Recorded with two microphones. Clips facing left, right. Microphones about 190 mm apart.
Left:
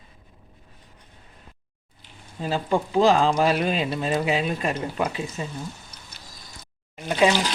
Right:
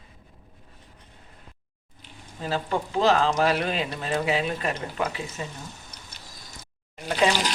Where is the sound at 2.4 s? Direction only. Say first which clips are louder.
Left 3 dB; 15° left (ahead or behind).